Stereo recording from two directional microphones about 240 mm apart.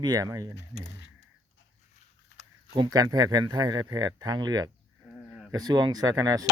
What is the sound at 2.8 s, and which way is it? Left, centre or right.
Speech, centre.